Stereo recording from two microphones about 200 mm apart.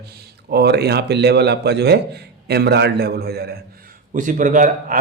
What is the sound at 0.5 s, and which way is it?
A man's voice, 55° right (ahead or behind).